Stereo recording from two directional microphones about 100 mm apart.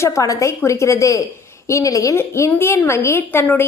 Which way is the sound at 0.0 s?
35° left (ahead or behind).